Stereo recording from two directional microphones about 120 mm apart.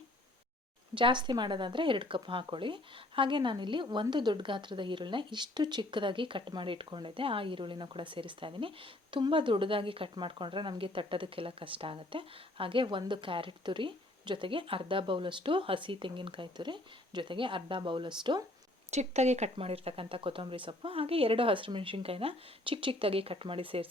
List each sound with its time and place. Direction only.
0.9 s speech: 40° right (ahead or behind)
18.9 s speech: 70° right (ahead or behind)
19.5 s speech: 55° right (ahead or behind)